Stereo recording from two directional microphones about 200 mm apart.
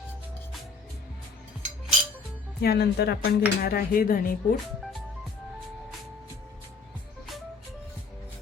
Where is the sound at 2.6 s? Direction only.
55° left (ahead or behind).